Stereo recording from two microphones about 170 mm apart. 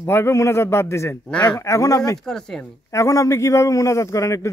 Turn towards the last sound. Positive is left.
turn(degrees=20)  # may be behind; listen again after turning